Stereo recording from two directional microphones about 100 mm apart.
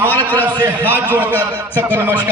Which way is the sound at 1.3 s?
20° left (ahead or behind).